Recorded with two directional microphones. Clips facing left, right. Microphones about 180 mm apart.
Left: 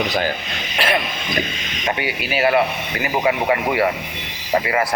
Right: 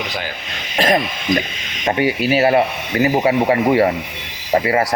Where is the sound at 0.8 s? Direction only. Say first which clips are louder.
Right 5 dB; 40° right (ahead or behind).